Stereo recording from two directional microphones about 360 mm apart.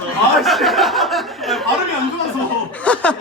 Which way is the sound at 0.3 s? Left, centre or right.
Centre.